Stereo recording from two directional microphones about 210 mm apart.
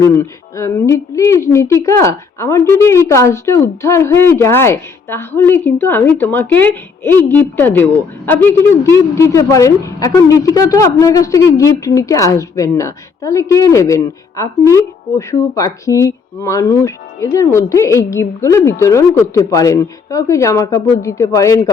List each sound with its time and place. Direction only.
0.0 s speech: 15° left (ahead or behind)